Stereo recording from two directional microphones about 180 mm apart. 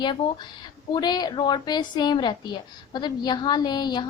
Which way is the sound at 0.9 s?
25° left (ahead or behind).